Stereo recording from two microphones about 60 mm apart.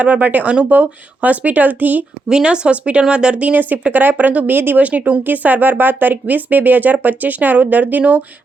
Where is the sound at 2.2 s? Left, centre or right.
Centre.